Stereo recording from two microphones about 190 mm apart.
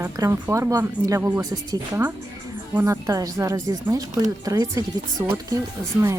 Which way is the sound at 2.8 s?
15° right (ahead or behind).